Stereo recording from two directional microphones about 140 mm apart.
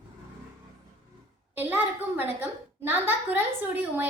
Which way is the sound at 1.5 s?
15° right (ahead or behind).